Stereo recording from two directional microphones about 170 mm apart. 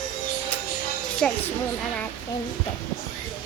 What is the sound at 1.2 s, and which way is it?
Speech, 5° left (ahead or behind).